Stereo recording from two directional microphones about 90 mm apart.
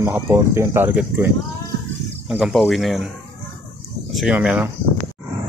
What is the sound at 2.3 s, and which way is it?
Speech, 5° right (ahead or behind).